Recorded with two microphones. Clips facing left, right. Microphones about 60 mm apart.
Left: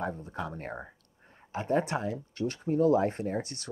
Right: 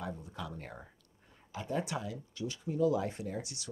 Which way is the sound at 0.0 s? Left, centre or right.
Left.